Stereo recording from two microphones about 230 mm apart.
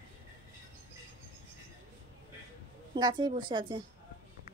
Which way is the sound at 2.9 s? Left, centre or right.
Centre.